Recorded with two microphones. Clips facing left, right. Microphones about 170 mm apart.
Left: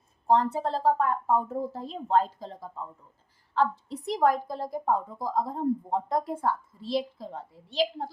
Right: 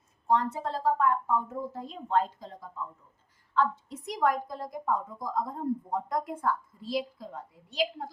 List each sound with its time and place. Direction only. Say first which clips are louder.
0.3 s a woman's voice: left 4 dB; 35° left (ahead or behind)